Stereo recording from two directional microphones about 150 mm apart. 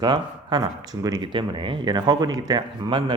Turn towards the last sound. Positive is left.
turn(degrees=-30)  # may be behind; listen again after turning